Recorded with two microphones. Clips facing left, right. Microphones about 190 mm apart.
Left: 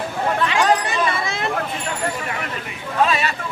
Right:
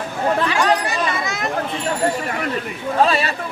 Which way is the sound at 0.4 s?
25° left (ahead or behind).